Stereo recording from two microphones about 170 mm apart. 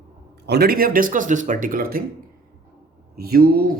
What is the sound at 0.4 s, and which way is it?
A man's voice, 70° right (ahead or behind).